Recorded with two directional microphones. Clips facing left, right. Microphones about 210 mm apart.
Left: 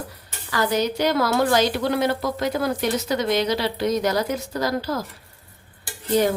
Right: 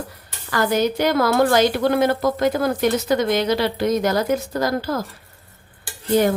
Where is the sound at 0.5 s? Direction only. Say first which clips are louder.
Right 3 dB; 50° right (ahead or behind).